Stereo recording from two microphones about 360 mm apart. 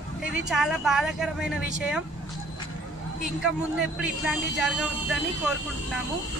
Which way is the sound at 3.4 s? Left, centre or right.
Centre.